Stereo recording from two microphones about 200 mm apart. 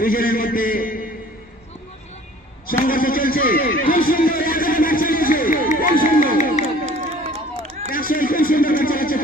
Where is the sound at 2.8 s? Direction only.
45° left (ahead or behind).